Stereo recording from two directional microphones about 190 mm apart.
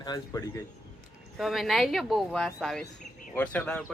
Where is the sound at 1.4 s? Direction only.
Centre (ahead or behind).